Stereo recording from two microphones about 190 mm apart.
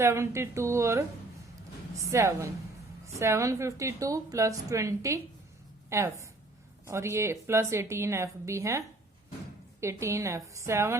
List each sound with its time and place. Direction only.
0.0 s a woman's voice: 15° right (ahead or behind)
2.0 s a woman's voice: 15° right (ahead or behind)
9.8 s a woman's voice: 15° right (ahead or behind)